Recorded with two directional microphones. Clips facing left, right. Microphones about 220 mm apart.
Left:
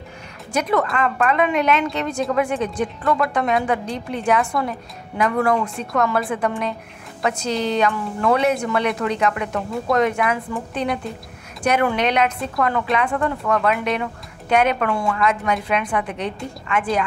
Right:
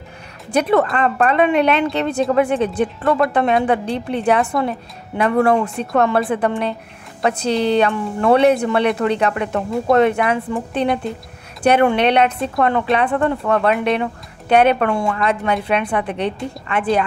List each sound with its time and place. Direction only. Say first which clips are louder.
0.5 s a woman's voice: right 5 dB; 30° right (ahead or behind)